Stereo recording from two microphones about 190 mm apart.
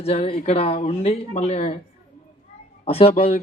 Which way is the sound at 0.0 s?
30° left (ahead or behind).